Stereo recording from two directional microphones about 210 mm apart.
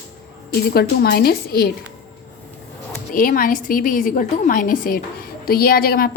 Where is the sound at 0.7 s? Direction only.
50° left (ahead or behind).